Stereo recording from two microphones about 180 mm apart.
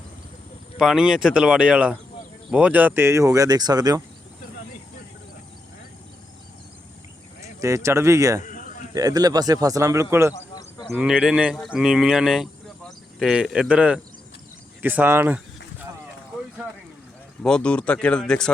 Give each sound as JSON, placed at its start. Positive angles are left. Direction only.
{"t": 0.8, "sound": "speech", "side_deg": -5}
{"t": 7.6, "sound": "speech", "side_deg": -15}
{"t": 8.4, "sound": "a sound", "side_deg": 45}
{"t": 9.0, "sound": "speech", "side_deg": -20}
{"t": 10.3, "sound": "a sound", "side_deg": 20}
{"t": 10.9, "sound": "speech", "side_deg": -5}
{"t": 17.4, "sound": "speech", "side_deg": 5}